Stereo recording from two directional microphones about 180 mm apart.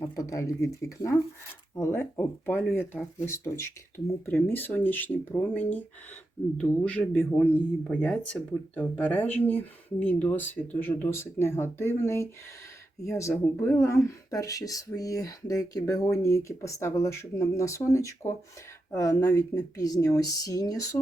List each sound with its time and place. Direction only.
0.0 s speech: 15° left (ahead or behind)